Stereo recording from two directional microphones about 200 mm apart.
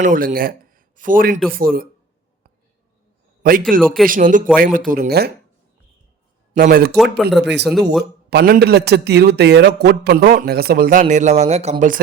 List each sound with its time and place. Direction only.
0.0 s a man's voice: 40° right (ahead or behind)
3.4 s a man's voice: 45° right (ahead or behind)
6.5 s speech: 45° right (ahead or behind)
7.3 s a man's voice: 60° right (ahead or behind); by 11.9 s 35° right (ahead or behind)